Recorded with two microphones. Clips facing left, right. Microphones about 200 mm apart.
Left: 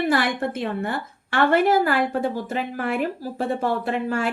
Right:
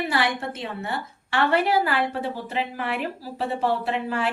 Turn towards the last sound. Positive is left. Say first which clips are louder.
# left 2 dB
turn(degrees=50)  # may be behind; listen again after turning